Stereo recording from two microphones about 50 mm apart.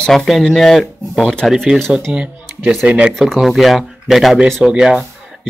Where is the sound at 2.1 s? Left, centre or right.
Centre.